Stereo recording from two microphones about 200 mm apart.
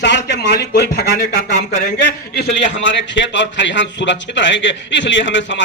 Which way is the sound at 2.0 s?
60° left (ahead or behind).